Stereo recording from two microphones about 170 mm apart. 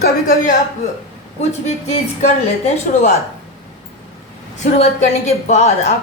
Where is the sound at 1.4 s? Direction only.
40° left (ahead or behind).